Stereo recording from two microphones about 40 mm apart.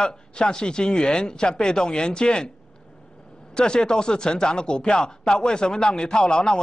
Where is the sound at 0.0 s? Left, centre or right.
Centre.